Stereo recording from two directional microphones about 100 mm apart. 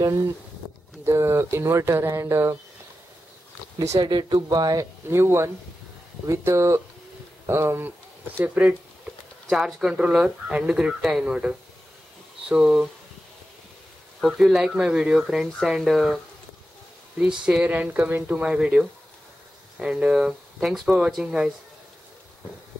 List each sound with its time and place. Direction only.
1.0 s speech: 25° right (ahead or behind)
3.7 s speech: 30° right (ahead or behind)
4.0 s speech: 45° right (ahead or behind)
5.1 s speech: 25° right (ahead or behind)
9.5 s speech: 5° right (ahead or behind)
14.2 s speech: 5° right (ahead or behind)
17.2 s speech: 10° right (ahead or behind)